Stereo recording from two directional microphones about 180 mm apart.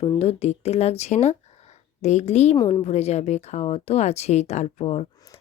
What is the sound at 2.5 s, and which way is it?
Speech, 25° left (ahead or behind).